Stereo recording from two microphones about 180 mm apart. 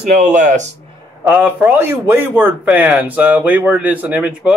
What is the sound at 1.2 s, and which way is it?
A man's voice, 10° right (ahead or behind).